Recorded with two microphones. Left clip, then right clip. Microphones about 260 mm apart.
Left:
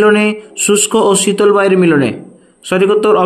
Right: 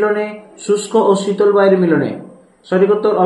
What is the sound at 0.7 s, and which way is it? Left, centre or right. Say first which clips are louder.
A man's voice: left 2 dB; left.